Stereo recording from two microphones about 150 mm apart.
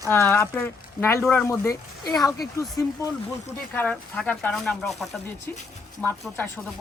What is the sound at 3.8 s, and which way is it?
Speech, 10° left (ahead or behind).